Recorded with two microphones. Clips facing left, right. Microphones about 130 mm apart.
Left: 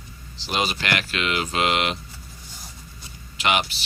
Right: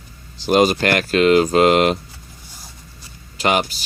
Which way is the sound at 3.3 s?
40° right (ahead or behind).